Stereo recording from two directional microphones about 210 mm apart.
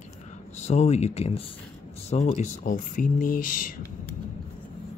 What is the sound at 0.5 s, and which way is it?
Speech, 35° left (ahead or behind).